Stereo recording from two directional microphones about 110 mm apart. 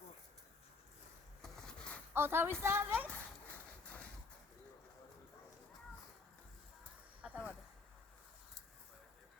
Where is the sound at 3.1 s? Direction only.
15° left (ahead or behind).